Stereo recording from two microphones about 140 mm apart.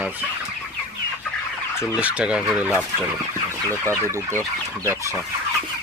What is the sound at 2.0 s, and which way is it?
Speech, 10° right (ahead or behind).